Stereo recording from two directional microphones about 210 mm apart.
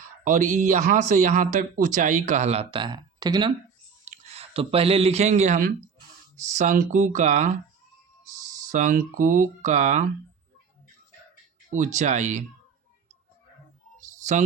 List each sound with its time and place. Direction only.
0.3 s speech: 35° right (ahead or behind); by 3.5 s 20° right (ahead or behind)
4.0 s speech: 35° right (ahead or behind)
8.7 s speech: 40° right (ahead or behind)
11.7 s speech: 35° right (ahead or behind)